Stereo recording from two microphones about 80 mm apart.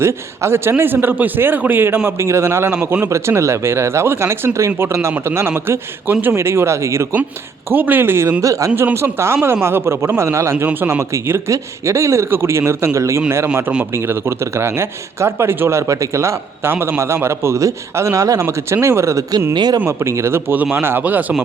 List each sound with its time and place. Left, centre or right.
0.0 s a man's voice: right
7.7 s a man's voice: right
8.7 s a man's voice: right
11.1 s speech: right
19.5 s speech: right
19.8 s a man's voice: right